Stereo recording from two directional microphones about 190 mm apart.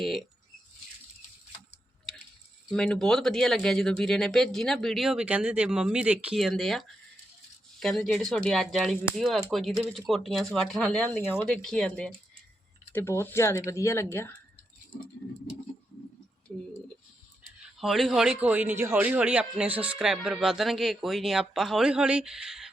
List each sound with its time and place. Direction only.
0.0 s speech: centre (ahead or behind)
2.6 s a man's voice: 5° left (ahead or behind)
17.7 s a man's voice: centre (ahead or behind)